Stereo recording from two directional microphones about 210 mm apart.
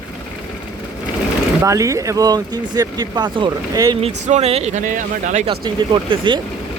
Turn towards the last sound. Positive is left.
turn(degrees=-20)  # may be behind; listen again after turning